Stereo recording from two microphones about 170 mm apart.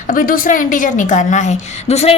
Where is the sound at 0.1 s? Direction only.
55° left (ahead or behind).